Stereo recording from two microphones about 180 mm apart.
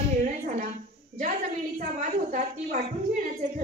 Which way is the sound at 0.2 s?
40° right (ahead or behind).